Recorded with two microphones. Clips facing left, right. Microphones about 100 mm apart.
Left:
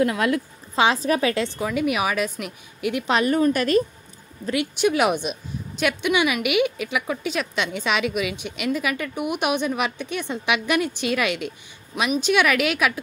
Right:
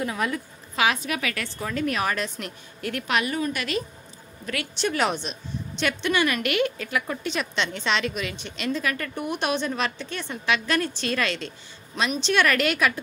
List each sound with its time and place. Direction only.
0.0 s a woman's voice: 90° left
0.7 s a woman's voice: 30° left (ahead or behind)
1.6 s a woman's voice: 10° left (ahead or behind)
3.1 s a woman's voice: 40° left (ahead or behind)
4.5 s a woman's voice: 15° left (ahead or behind)